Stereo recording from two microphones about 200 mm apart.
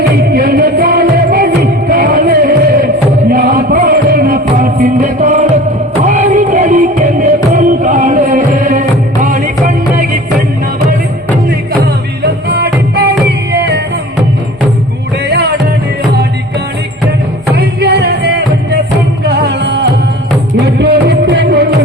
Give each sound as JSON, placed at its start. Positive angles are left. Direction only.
{"t": 0.2, "sound": "music", "side_deg": -50}
{"t": 12.5, "sound": "music", "side_deg": -50}
{"t": 15.3, "sound": "music", "side_deg": -55}
{"t": 17.5, "sound": "music", "side_deg": -55}